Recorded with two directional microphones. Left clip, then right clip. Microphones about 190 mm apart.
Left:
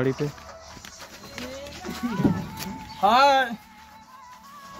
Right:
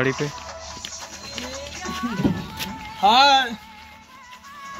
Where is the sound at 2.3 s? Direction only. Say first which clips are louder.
Right 4 dB; 20° left (ahead or behind); by 3.5 s 40° left (ahead or behind).